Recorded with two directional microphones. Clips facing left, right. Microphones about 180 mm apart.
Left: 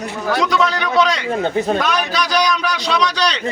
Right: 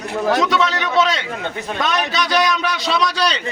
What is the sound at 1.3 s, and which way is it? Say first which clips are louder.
Speech: left 8 dB; 40° left (ahead or behind).